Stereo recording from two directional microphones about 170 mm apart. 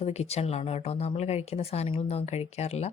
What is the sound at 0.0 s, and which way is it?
A woman's voice, 40° left (ahead or behind).